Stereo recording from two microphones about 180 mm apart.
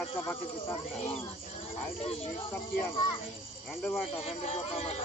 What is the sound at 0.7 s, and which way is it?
Speech, 35° left (ahead or behind).